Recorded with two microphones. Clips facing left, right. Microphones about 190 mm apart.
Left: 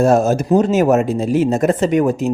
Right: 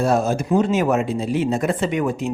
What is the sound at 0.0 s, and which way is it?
Speech, 45° left (ahead or behind).